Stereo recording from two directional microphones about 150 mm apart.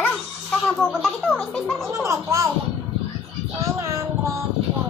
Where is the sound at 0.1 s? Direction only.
5° left (ahead or behind).